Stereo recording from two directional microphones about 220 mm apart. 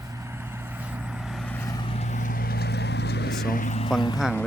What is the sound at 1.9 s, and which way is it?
Vehicle, 30° left (ahead or behind).